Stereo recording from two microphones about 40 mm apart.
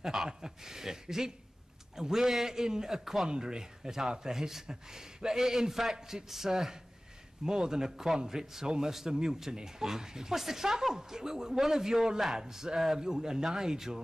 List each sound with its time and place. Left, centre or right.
0.0 s speech: centre